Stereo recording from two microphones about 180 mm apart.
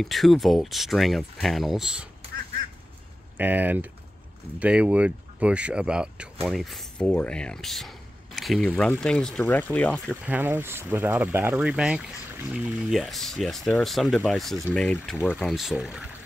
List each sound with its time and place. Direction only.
0.0 s speech: centre (ahead or behind)
3.3 s speech: 10° right (ahead or behind); by 10.1 s 5° left (ahead or behind)
10.2 s speech: 10° right (ahead or behind)